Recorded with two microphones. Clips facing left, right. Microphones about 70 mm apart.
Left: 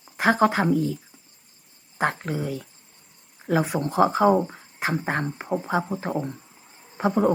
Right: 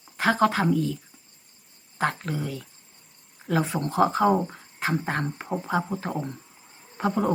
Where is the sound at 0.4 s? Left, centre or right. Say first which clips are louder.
Even; left.